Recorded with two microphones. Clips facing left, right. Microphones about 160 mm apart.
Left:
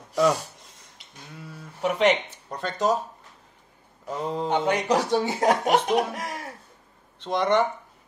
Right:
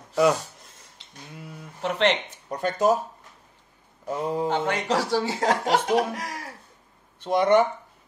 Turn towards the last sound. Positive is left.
turn(degrees=-10)  # may be behind; listen again after turning